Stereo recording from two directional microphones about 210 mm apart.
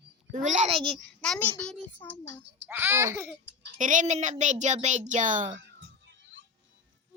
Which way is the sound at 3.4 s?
60° right (ahead or behind).